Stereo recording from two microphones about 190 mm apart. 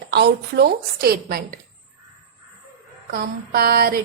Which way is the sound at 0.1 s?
60° right (ahead or behind).